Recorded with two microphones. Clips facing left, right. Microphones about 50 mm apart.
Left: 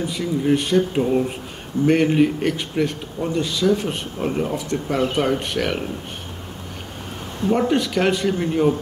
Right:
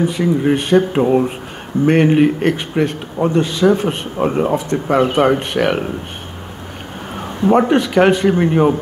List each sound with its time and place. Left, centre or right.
0.0 s a man's voice: right
7.4 s a man's voice: right